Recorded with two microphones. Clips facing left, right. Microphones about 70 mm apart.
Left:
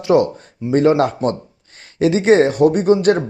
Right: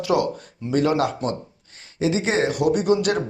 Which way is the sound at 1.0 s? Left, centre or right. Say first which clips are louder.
Left 6 dB; left.